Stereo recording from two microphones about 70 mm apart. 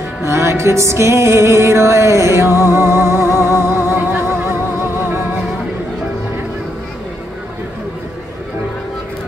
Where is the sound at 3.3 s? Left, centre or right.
Left.